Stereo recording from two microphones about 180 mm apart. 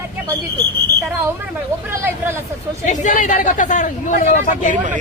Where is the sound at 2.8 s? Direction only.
45° left (ahead or behind).